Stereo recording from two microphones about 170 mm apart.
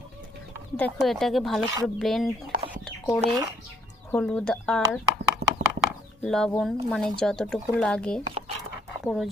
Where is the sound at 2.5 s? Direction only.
55° right (ahead or behind).